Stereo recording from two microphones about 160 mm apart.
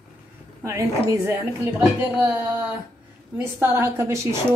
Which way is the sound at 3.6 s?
15° right (ahead or behind).